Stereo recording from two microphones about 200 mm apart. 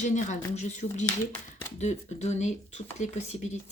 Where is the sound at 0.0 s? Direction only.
35° left (ahead or behind).